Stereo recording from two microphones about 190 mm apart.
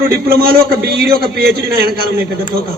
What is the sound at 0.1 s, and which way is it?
A man's voice, 50° right (ahead or behind).